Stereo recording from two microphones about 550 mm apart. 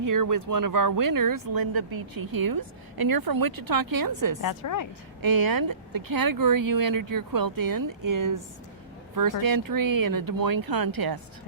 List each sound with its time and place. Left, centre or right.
0.0 s speech: right
4.4 s a woman's voice: left
5.2 s speech: right